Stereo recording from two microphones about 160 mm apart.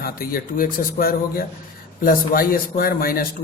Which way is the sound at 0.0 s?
70° left (ahead or behind).